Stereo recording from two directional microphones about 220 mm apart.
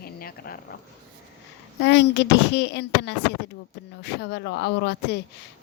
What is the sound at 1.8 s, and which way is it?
A woman's voice, 55° left (ahead or behind).